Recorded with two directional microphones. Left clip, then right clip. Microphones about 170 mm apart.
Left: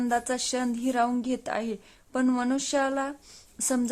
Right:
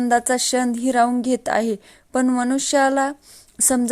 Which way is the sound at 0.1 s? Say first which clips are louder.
Right 11 dB; 25° right (ahead or behind).